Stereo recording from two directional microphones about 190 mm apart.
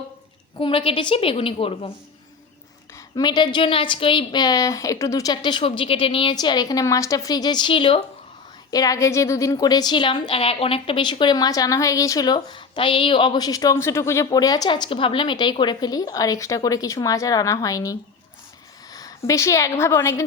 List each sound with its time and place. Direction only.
0.6 s a woman's voice: 25° left (ahead or behind)
3.2 s a woman's voice: 25° left (ahead or behind)
18.9 s a woman's voice: 15° left (ahead or behind)